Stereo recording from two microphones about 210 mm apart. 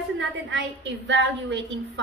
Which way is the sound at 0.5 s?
60° right (ahead or behind).